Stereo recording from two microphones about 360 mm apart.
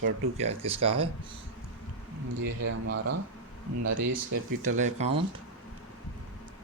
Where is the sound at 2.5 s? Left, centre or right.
Right.